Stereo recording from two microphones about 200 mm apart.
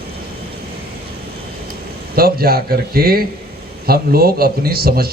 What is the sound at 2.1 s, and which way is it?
A man's voice, 50° right (ahead or behind).